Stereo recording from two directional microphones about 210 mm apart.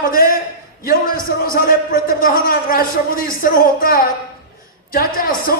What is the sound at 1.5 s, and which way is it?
A man's voice, 45° left (ahead or behind).